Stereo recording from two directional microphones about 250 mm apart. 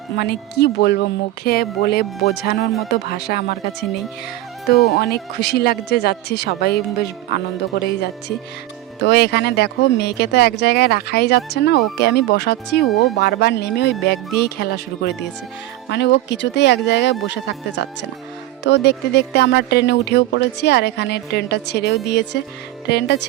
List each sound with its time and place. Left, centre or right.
0.2 s speech: left
4.7 s speech: left